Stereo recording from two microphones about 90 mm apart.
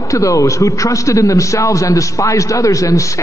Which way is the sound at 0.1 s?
35° left (ahead or behind).